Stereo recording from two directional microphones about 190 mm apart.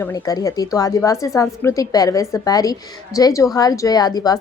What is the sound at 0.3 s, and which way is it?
A woman's voice, 20° left (ahead or behind).